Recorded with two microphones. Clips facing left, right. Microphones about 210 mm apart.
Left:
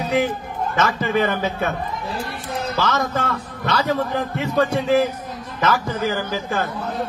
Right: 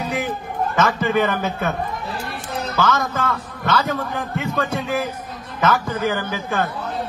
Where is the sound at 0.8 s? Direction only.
50° right (ahead or behind).